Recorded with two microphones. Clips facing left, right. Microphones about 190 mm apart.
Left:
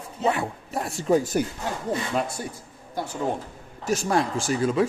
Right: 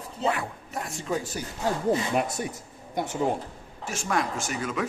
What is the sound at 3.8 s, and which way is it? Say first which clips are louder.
Speech: left 5 dB; 35° left (ahead or behind).